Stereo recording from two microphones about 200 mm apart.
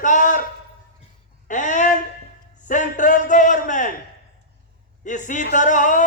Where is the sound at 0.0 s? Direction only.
40° left (ahead or behind).